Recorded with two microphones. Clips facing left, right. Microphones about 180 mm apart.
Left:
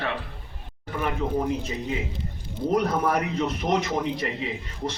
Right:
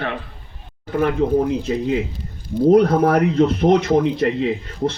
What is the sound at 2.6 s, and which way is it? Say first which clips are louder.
A man's voice: right 10 dB; 60° right (ahead or behind).